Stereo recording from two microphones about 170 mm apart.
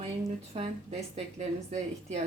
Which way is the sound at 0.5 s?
40° right (ahead or behind).